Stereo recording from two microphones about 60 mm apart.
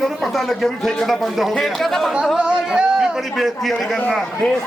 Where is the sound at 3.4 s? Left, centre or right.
Centre.